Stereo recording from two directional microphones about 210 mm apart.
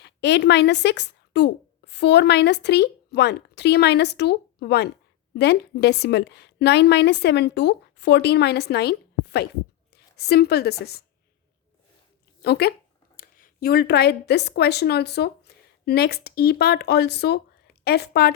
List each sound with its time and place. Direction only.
0.0 s a woman's voice: 55° left (ahead or behind)
12.4 s a woman's voice: 50° left (ahead or behind)